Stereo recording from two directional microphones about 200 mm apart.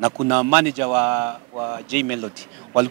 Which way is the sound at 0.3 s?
10° right (ahead or behind).